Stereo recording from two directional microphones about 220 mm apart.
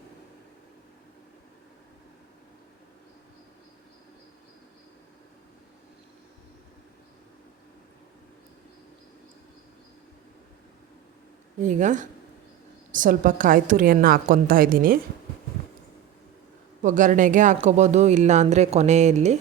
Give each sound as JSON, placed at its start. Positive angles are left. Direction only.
{"t": 11.6, "sound": "speech", "side_deg": -35}
{"t": 16.8, "sound": "speech", "side_deg": -35}